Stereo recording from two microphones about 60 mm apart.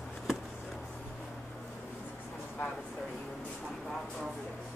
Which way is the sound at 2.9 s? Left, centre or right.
Centre.